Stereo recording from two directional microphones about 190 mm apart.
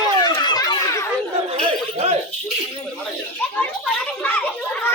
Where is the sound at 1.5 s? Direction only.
35° right (ahead or behind).